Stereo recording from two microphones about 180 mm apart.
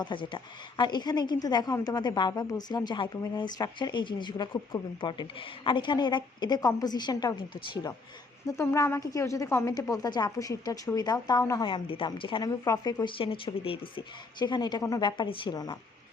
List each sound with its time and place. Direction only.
0.0 s a woman's voice: 25° left (ahead or behind)